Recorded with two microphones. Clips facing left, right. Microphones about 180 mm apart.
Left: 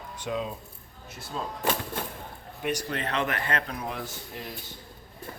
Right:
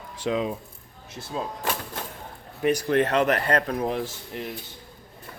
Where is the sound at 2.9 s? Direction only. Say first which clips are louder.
Right 9 dB; 45° right (ahead or behind).